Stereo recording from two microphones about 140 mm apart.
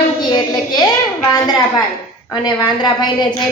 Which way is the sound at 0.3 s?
30° left (ahead or behind).